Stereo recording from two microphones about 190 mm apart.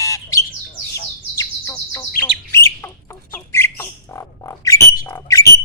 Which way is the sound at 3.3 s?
15° left (ahead or behind).